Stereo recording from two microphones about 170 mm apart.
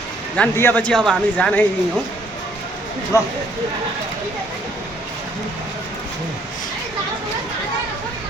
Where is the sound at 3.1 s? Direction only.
20° left (ahead or behind).